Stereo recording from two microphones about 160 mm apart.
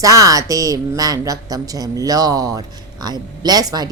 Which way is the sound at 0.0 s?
20° right (ahead or behind).